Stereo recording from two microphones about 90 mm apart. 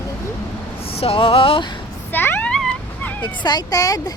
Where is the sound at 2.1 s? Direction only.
20° left (ahead or behind).